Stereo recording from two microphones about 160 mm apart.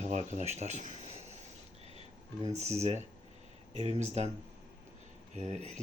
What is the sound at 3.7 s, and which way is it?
Speech, 40° right (ahead or behind).